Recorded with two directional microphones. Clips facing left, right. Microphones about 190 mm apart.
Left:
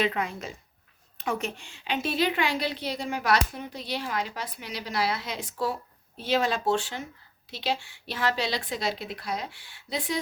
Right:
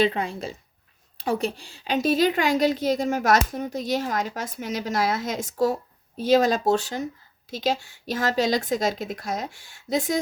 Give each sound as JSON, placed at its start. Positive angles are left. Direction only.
{"t": 0.0, "sound": "a woman's voice", "side_deg": -30}